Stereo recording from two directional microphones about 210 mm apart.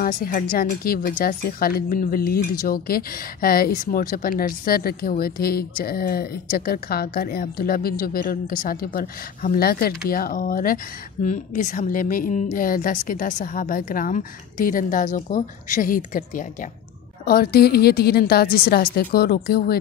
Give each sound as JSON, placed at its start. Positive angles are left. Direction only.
{"t": 0.0, "sound": "a woman's voice", "side_deg": 40}